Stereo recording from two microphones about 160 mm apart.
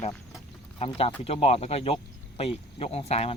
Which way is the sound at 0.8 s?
35° left (ahead or behind).